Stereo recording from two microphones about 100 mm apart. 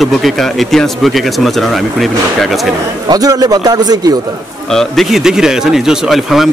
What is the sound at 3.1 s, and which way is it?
A man's voice, 40° right (ahead or behind).